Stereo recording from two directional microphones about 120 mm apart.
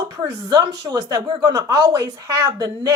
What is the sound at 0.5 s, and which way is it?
Speech, 30° right (ahead or behind).